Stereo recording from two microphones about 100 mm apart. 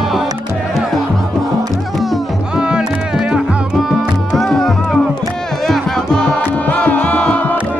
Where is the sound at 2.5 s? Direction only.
10° right (ahead or behind).